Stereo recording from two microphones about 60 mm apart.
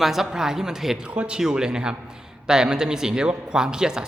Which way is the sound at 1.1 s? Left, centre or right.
Centre.